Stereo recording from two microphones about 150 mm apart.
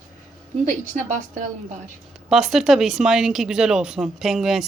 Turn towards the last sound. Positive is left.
turn(degrees=-5)  # may be behind; listen again after turning